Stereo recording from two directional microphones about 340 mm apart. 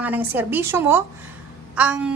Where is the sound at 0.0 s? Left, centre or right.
Centre.